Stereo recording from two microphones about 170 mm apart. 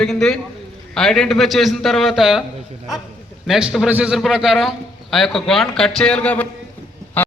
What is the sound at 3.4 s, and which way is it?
A man's voice, centre (ahead or behind).